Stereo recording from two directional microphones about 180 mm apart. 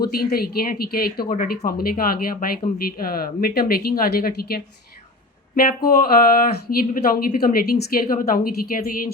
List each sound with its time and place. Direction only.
0.1 s a woman's voice: 55° left (ahead or behind)
1.3 s a woman's voice: 45° left (ahead or behind)